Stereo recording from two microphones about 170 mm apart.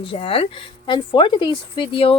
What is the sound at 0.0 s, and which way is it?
Speech, 30° left (ahead or behind).